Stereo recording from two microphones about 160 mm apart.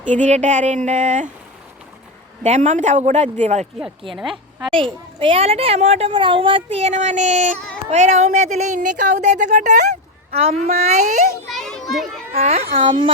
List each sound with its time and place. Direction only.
0.0 s speech: 50° right (ahead or behind)
2.4 s speech: 45° right (ahead or behind)
4.1 s a woman's voice: centre (ahead or behind)
4.7 s a child's voice: 35° right (ahead or behind)
6.1 s speech: 30° right (ahead or behind)
11.5 s children playing: centre (ahead or behind)
12.4 s a child's voice: 40° right (ahead or behind)